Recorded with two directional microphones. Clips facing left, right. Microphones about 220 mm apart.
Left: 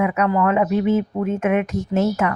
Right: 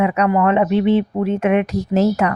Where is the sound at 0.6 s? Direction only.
85° right.